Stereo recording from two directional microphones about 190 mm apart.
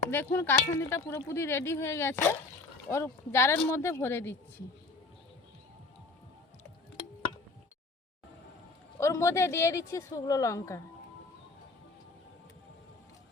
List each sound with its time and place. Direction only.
0.1 s speech: 10° left (ahead or behind)
9.0 s speech: 15° left (ahead or behind)